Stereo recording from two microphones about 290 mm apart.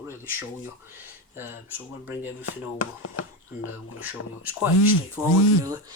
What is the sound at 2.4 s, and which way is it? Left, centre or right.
Speech, left.